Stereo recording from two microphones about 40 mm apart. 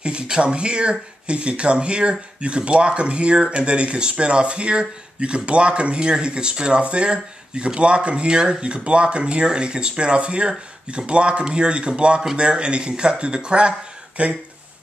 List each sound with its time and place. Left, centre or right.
0.0 s speech: right